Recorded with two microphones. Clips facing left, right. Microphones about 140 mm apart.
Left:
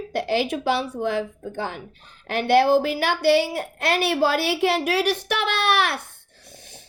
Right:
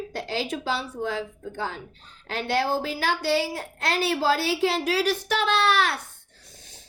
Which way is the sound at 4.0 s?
65° left (ahead or behind).